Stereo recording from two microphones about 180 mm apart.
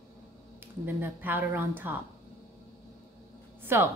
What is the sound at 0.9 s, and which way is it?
A woman's voice, 10° right (ahead or behind).